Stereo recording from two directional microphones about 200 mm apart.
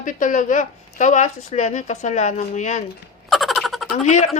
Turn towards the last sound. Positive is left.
turn(degrees=35)  # may be behind; listen again after turning